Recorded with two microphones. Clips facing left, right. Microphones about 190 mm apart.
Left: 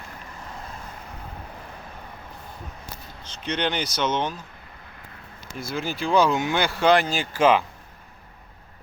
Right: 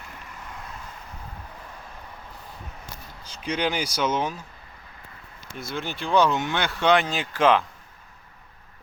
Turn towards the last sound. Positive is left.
turn(degrees=0)  # may be behind; listen again after turning